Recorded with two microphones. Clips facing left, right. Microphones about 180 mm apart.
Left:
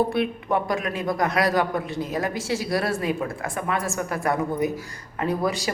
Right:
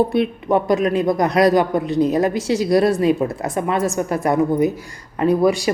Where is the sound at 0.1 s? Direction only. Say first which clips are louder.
Right 6 dB; 20° right (ahead or behind).